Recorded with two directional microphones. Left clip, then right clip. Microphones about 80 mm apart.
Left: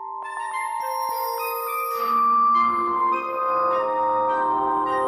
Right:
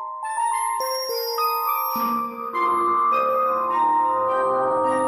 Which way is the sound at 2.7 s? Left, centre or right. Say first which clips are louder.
Right 2 dB; centre.